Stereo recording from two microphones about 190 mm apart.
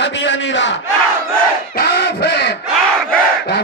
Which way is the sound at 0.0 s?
70° left (ahead or behind).